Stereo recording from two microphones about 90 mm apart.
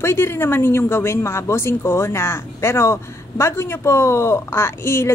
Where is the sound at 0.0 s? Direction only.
30° left (ahead or behind).